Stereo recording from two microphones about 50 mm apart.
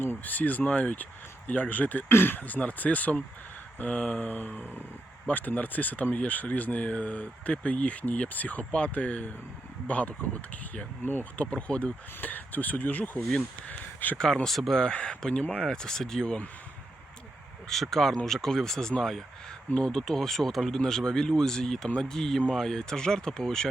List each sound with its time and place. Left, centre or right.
0.0 s speech: left
2.0 s speech: left
2.4 s speech: left
11.5 s speech: left
12.2 s speech: left
14.4 s speech: centre
14.8 s speech: centre
17.7 s speech: centre